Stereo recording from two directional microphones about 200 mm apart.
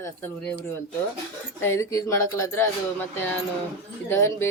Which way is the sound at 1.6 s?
15° left (ahead or behind).